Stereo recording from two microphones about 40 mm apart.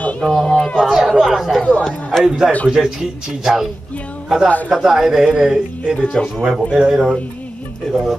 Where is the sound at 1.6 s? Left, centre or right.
Left.